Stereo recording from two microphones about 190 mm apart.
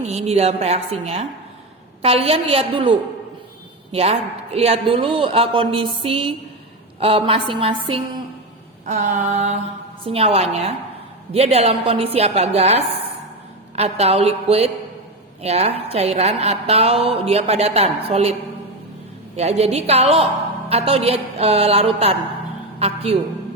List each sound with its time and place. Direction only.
0.1 s a woman's voice: 35° right (ahead or behind)
3.9 s speech: 35° right (ahead or behind)
8.9 s a woman's voice: 40° right (ahead or behind)
19.4 s a woman's voice: 35° right (ahead or behind)